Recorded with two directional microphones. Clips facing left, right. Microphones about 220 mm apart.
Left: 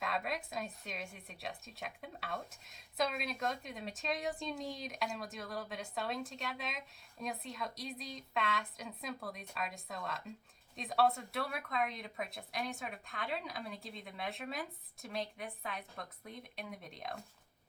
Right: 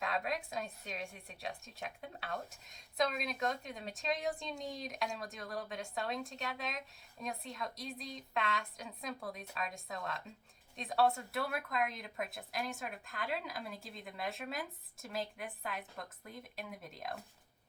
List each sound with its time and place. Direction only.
0.0 s a woman's voice: centre (ahead or behind)